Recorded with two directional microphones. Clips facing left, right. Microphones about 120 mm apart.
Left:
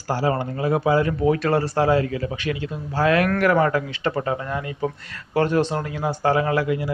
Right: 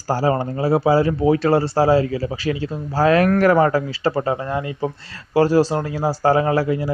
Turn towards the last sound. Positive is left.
turn(degrees=-35)  # may be behind; listen again after turning